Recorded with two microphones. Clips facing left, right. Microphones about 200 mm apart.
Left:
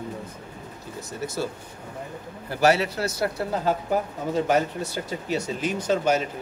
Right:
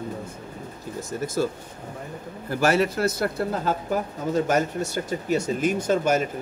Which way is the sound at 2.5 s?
50° right (ahead or behind).